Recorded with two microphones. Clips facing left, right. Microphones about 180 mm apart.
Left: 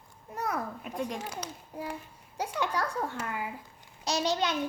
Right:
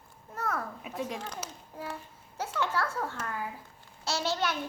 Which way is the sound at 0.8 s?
Centre (ahead or behind).